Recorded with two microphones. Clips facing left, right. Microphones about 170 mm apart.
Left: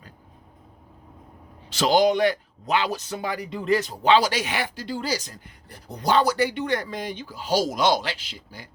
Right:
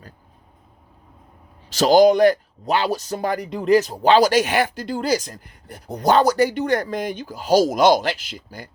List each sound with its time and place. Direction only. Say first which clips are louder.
1.7 s speech: right 6 dB; 40° right (ahead or behind)